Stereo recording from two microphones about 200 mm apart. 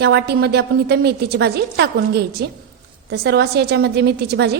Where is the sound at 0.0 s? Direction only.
55° right (ahead or behind).